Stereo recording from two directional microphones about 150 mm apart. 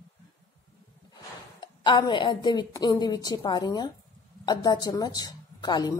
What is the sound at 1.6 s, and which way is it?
A woman's voice, 30° left (ahead or behind).